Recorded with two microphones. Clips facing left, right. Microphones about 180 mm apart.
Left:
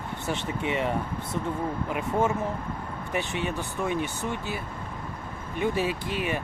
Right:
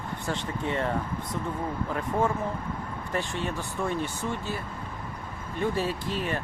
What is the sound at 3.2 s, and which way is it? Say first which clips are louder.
Speech: left 1 dB; 70° left (ahead or behind).